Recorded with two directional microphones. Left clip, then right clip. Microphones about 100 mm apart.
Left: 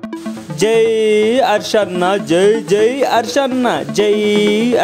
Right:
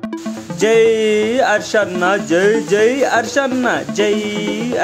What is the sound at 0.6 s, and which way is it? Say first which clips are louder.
Speech: even; 45° left (ahead or behind).